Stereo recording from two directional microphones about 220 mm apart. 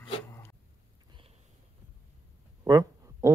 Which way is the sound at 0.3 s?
10° left (ahead or behind).